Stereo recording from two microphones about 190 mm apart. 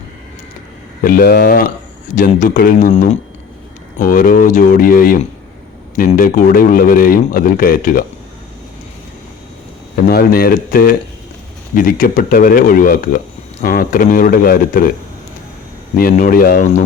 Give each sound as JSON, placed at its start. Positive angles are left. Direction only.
{"t": 1.0, "sound": "speech", "side_deg": 50}
{"t": 10.1, "sound": "speech", "side_deg": 55}
{"t": 16.0, "sound": "speech", "side_deg": 45}